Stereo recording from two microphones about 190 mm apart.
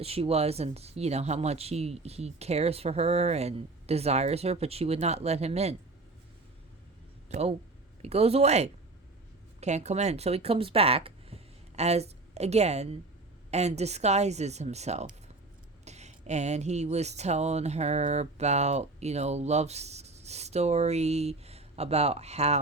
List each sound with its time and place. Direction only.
0.0 s speech: 30° right (ahead or behind)
7.3 s speech: 35° right (ahead or behind)